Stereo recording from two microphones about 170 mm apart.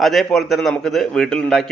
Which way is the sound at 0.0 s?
Centre (ahead or behind).